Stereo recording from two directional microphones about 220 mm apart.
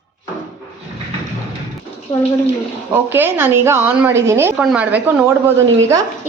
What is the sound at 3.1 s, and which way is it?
A woman's voice, 10° right (ahead or behind).